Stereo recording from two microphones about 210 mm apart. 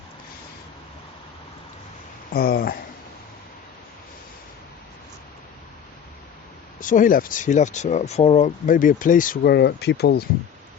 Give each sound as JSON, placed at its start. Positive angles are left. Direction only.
{"t": 2.3, "sound": "speech", "side_deg": 45}
{"t": 6.7, "sound": "speech", "side_deg": 40}